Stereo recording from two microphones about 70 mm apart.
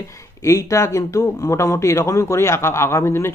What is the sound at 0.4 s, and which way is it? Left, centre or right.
Speech, left.